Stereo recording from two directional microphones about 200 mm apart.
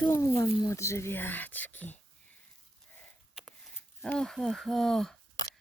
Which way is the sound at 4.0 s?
5° left (ahead or behind).